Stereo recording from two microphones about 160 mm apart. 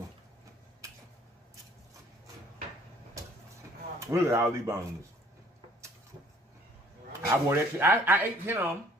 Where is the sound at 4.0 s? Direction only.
20° right (ahead or behind).